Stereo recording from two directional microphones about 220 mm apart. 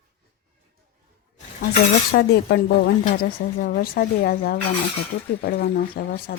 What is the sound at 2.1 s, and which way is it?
Speech, 45° left (ahead or behind).